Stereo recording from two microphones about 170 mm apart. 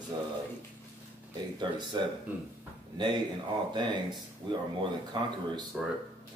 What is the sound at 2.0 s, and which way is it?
Speech, 25° right (ahead or behind).